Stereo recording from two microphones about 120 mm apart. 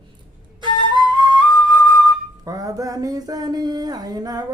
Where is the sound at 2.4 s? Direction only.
30° right (ahead or behind).